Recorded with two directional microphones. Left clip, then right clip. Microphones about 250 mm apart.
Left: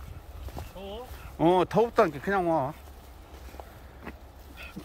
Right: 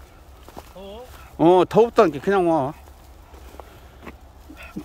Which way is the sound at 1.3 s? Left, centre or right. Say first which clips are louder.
Right 8 dB; right.